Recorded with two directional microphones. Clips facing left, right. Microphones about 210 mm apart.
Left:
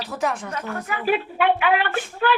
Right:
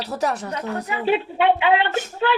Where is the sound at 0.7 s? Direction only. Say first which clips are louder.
Right 2 dB; 20° right (ahead or behind).